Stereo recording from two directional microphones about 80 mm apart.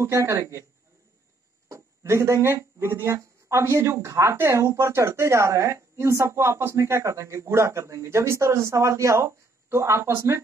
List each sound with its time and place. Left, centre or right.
0.0 s speech: right
1.7 s speech: right